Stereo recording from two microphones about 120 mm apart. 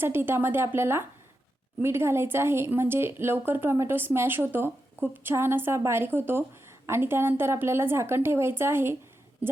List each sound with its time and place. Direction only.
0.0 s a woman's voice: 20° right (ahead or behind)